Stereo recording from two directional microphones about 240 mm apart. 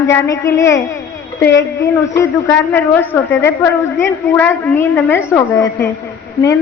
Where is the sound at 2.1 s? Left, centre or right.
Centre.